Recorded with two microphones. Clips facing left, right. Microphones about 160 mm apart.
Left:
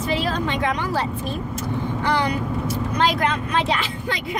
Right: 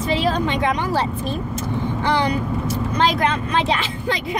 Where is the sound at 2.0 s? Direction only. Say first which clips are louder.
Right 2 dB; 25° right (ahead or behind).